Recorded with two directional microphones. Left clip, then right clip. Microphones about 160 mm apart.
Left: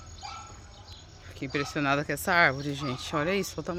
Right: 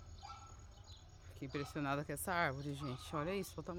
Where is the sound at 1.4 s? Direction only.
20° right (ahead or behind).